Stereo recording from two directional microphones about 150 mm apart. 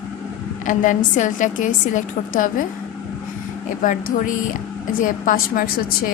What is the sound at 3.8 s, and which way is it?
Speech, 60° left (ahead or behind).